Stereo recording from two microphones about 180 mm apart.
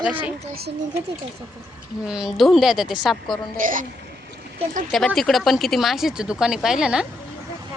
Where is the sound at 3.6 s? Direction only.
50° right (ahead or behind).